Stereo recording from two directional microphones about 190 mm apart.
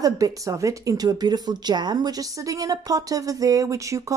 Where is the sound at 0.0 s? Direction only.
15° right (ahead or behind).